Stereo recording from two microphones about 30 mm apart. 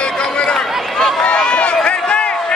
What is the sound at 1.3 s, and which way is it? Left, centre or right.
Run, left.